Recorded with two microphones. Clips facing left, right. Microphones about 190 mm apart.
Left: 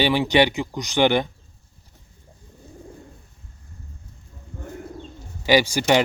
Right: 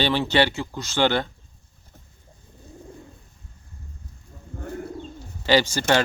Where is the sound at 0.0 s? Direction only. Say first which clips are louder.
Left 3 dB; 15° left (ahead or behind).